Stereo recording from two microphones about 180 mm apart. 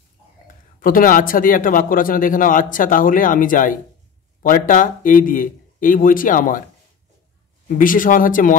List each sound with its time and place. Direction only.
0.7 s speech: 50° left (ahead or behind)
7.6 s speech: 50° left (ahead or behind)